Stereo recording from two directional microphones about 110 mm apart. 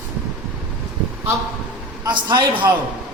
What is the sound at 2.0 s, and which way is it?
Speech, 45° right (ahead or behind).